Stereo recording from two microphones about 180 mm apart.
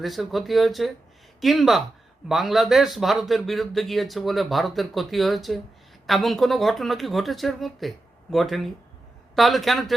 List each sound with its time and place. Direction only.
0.0 s speech: centre (ahead or behind)